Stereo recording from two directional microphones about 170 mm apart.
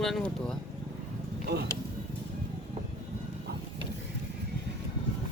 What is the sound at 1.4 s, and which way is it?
Speech, 70° right (ahead or behind).